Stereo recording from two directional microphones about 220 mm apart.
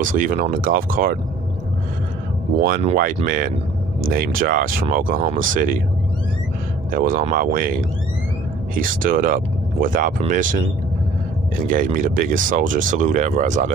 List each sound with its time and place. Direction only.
0.0 s speech: 40° right (ahead or behind)
2.8 s speech: 35° right (ahead or behind)
6.9 s speech: 40° right (ahead or behind)
8.7 s speech: 40° right (ahead or behind)
11.7 s speech: 35° right (ahead or behind)